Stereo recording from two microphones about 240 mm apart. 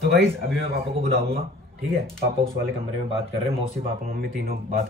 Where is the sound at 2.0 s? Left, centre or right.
Right.